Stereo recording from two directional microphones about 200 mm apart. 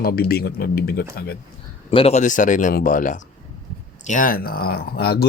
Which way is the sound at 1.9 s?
30° left (ahead or behind).